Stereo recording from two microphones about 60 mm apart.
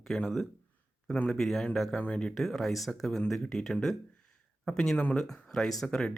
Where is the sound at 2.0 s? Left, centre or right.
Centre.